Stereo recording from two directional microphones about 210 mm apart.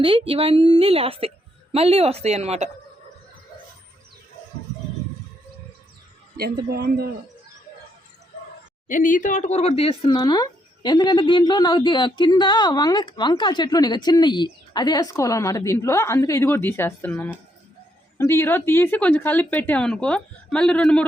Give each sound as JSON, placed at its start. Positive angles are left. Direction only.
{"t": 0.0, "sound": "a woman's voice", "side_deg": -25}
{"t": 6.3, "sound": "speech", "side_deg": -45}
{"t": 8.9, "sound": "speech", "side_deg": 40}